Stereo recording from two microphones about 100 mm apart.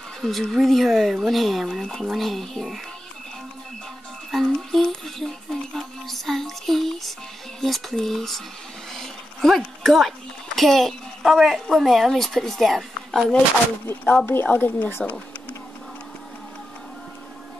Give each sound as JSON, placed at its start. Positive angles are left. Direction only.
{"t": 0.2, "sound": "speech", "side_deg": 0}
{"t": 4.3, "sound": "music", "side_deg": 5}
{"t": 7.6, "sound": "speech", "side_deg": 0}
{"t": 14.2, "sound": "a woman's voice", "side_deg": 20}